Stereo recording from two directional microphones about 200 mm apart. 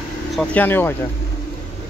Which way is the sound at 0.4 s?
5° left (ahead or behind).